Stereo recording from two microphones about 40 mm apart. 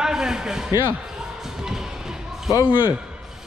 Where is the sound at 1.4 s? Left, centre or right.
Centre.